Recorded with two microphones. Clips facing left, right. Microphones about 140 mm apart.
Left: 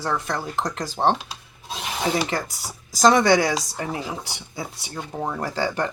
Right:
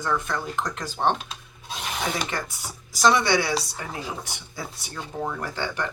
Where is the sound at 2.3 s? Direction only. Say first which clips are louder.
Left 4 dB; 35° left (ahead or behind).